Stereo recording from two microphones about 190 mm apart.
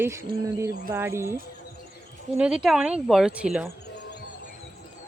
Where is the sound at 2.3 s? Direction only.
5° right (ahead or behind).